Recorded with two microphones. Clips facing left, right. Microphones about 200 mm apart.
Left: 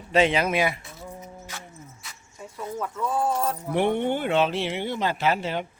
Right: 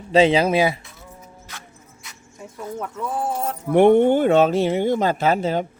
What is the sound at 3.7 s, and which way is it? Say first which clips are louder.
Speech: right 11 dB; 50° right (ahead or behind).